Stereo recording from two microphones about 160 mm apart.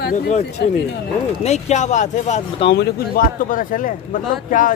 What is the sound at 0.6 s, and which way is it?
Speech, 90° left.